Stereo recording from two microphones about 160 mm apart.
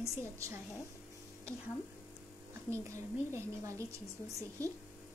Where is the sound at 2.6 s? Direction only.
15° right (ahead or behind).